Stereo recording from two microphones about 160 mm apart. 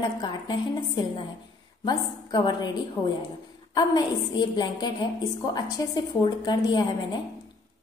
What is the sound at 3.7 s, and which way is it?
A woman's voice, 25° left (ahead or behind).